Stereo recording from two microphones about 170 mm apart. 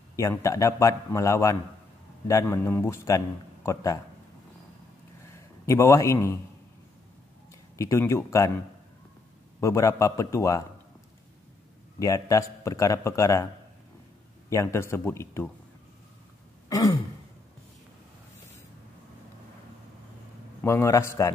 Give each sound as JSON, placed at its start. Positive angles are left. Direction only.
{"t": 0.1, "sound": "a man's voice", "side_deg": 15}
{"t": 5.3, "sound": "a man's voice", "side_deg": 15}
{"t": 7.7, "sound": "a man's voice", "side_deg": 20}
{"t": 9.6, "sound": "a man's voice", "side_deg": 15}
{"t": 12.0, "sound": "a man's voice", "side_deg": 20}
{"t": 14.5, "sound": "a man's voice", "side_deg": 15}
{"t": 16.6, "sound": "throat clearing", "side_deg": 20}
{"t": 20.6, "sound": "a man's voice", "side_deg": 15}